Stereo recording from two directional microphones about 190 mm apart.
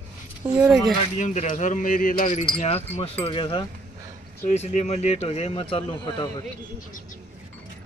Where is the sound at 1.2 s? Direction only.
40° left (ahead or behind).